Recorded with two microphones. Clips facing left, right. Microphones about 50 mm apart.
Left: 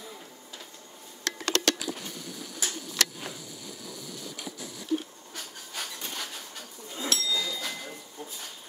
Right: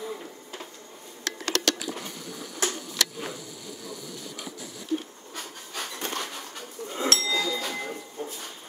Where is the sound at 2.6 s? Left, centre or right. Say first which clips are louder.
Right 7 dB; right.